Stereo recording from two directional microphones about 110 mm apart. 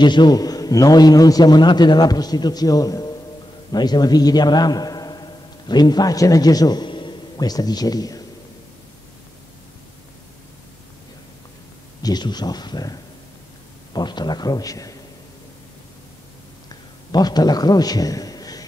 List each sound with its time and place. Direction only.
0.0 s a man's voice: 45° left (ahead or behind)
12.0 s a man's voice: 40° left (ahead or behind)
17.1 s a man's voice: 40° left (ahead or behind)